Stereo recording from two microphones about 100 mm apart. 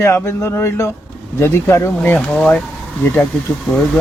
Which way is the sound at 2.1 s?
10° left (ahead or behind).